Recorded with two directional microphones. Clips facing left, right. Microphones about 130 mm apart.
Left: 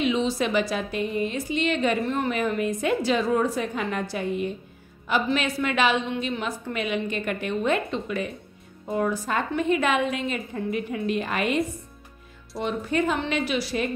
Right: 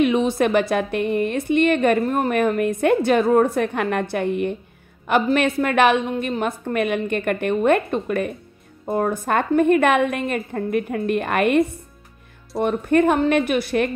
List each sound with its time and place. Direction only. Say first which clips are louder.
0.0 s a woman's voice: right 6 dB; 55° right (ahead or behind)